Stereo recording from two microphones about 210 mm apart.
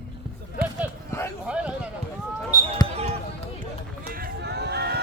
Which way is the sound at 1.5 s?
5° right (ahead or behind).